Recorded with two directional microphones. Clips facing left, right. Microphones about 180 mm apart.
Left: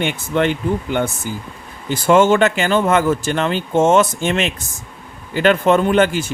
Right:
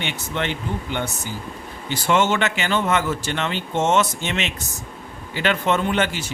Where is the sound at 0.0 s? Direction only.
50° left (ahead or behind).